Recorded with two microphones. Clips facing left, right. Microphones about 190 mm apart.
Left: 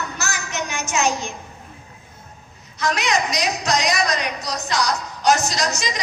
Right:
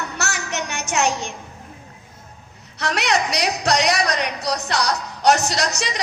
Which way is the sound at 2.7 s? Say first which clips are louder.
Even; 70° right (ahead or behind).